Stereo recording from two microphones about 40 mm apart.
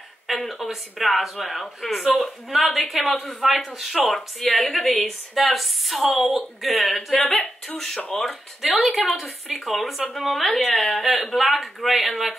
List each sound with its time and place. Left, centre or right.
0.3 s speech: centre
10.7 s a woman's voice: centre
11.0 s speech: centre